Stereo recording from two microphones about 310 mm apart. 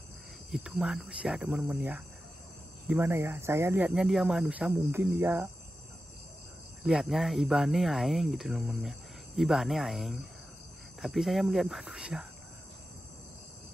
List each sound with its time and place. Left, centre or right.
0.5 s speech: centre
6.8 s speech: centre